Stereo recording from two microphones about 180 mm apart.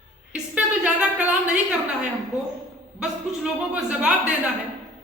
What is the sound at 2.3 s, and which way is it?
Speech, 15° left (ahead or behind).